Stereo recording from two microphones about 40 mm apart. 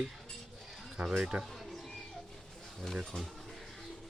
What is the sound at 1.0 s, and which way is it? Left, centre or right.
Speech, right.